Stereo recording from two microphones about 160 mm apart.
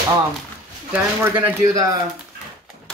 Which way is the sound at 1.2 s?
15° right (ahead or behind).